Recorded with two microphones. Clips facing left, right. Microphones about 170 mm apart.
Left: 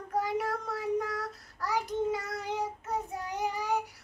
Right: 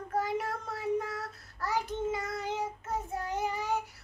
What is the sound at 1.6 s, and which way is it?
Child singing, 10° left (ahead or behind).